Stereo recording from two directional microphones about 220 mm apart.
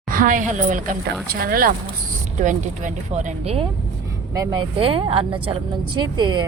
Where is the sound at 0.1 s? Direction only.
40° right (ahead or behind).